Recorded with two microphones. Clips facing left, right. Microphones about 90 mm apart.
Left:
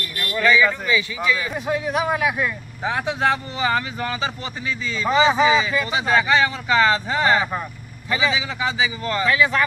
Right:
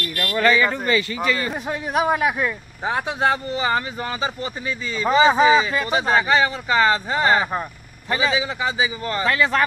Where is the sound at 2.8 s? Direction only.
30° right (ahead or behind).